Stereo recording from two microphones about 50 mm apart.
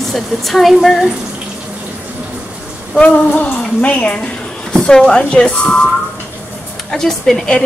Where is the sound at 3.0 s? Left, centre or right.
Left.